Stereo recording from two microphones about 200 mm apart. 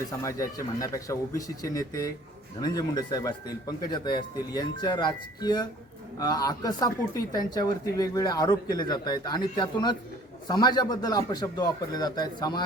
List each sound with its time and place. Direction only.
0.1 s speech: 15° left (ahead or behind)